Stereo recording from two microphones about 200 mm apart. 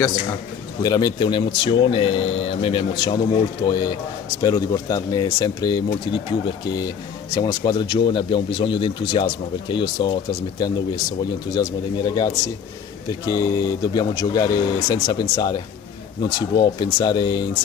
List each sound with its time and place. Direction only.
0.8 s speech: 20° left (ahead or behind)